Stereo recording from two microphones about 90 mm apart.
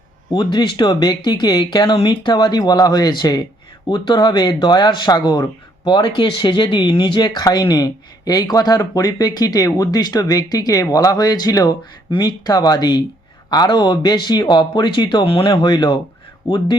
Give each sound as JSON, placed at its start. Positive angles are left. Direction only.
{"t": 0.3, "sound": "speech", "side_deg": 55}